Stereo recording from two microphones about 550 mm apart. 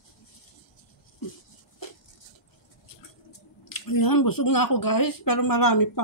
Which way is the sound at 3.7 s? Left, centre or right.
Left.